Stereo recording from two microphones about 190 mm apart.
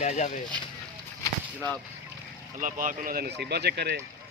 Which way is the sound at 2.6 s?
45° right (ahead or behind).